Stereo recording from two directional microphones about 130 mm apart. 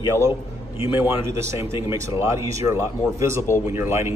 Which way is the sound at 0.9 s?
20° right (ahead or behind).